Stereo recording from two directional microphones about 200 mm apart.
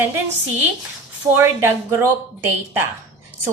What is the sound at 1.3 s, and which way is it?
Speech, 15° right (ahead or behind).